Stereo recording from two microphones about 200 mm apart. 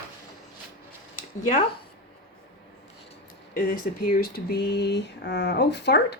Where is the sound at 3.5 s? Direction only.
45° left (ahead or behind).